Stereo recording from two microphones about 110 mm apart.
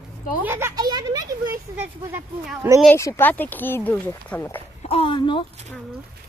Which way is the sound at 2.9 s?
25° left (ahead or behind).